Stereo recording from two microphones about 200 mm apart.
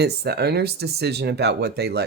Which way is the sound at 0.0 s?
55° right (ahead or behind).